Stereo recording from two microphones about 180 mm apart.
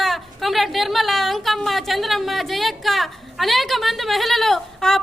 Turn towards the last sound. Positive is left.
turn(degrees=0)  # may be behind; listen again after turning